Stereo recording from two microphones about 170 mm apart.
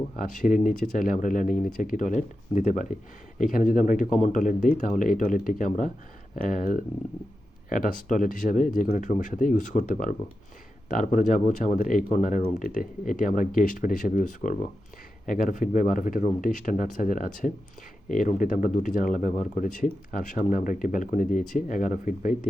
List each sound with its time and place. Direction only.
0.2 s speech: 50° left (ahead or behind)